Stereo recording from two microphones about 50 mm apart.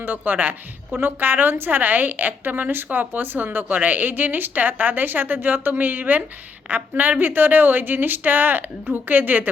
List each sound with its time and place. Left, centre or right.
0.0 s a woman's voice: right